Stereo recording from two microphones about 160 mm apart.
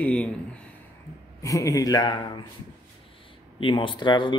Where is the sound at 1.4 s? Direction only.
20° left (ahead or behind).